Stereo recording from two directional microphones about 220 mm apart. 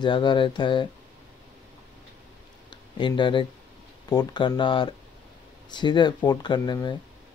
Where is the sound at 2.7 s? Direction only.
20° left (ahead or behind).